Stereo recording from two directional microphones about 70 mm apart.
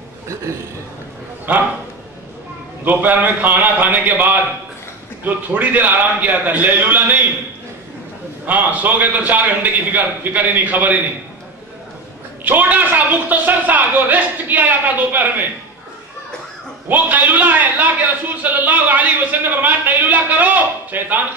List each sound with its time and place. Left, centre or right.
1.5 s a man's voice: right
2.8 s a man's voice: right
8.5 s a man's voice: right
12.4 s a man's voice: right
16.9 s a man's voice: right